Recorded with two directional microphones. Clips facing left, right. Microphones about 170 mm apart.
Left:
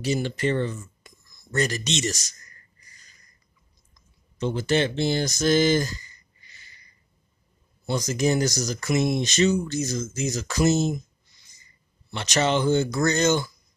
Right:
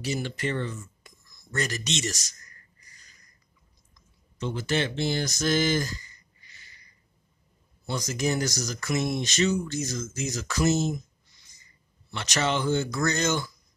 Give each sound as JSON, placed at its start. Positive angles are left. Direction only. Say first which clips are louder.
{"t": 0.0, "sound": "speech", "louder": "left 5 dB", "side_deg": 25}
{"t": 4.4, "sound": "speech", "louder": "left 5 dB", "side_deg": 30}
{"t": 7.8, "sound": "speech", "louder": "left 5 dB", "side_deg": 20}
{"t": 12.1, "sound": "speech", "louder": "left 4 dB", "side_deg": 20}